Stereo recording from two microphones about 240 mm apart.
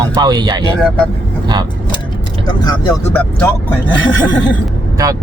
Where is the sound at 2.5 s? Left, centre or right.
Centre.